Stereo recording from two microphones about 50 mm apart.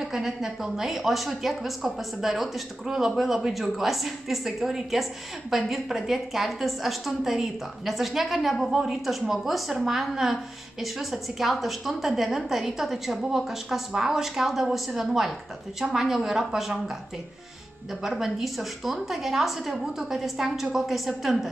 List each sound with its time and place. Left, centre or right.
0.0 s a woman's voice: centre
18.0 s a woman's voice: centre